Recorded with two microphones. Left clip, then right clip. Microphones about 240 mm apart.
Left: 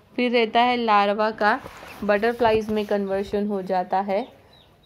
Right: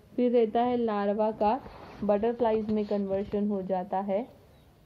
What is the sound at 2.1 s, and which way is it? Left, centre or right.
Speech, left.